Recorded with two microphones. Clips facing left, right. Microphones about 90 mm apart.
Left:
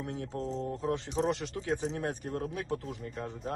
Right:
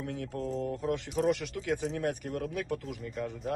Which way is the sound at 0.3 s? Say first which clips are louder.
Right 2 dB; 30° left (ahead or behind).